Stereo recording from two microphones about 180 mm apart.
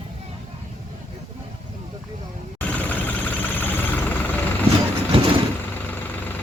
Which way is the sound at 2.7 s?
10° left (ahead or behind).